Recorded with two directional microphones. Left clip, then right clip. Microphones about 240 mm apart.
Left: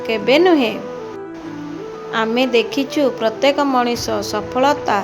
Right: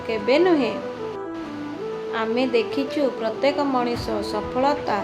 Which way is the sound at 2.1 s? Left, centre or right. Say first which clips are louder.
Left 6 dB; left.